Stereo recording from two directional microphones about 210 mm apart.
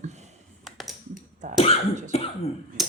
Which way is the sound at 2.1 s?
30° left (ahead or behind).